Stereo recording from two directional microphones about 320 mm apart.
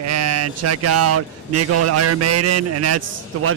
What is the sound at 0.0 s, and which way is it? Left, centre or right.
Speech, right.